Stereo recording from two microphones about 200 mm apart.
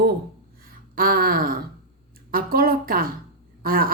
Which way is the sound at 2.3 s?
45° right (ahead or behind).